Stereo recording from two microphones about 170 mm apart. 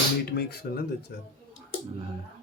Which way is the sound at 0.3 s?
70° left (ahead or behind).